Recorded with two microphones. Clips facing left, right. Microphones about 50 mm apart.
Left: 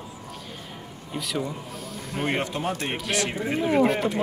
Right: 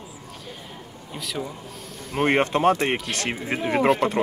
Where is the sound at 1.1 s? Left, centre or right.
Centre.